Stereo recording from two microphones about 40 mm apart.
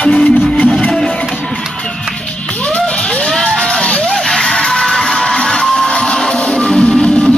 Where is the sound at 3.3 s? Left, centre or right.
Centre.